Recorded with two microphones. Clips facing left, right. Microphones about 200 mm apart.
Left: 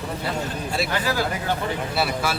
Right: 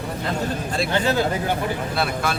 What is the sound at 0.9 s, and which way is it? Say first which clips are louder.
Speech: right 6 dB; 25° right (ahead or behind).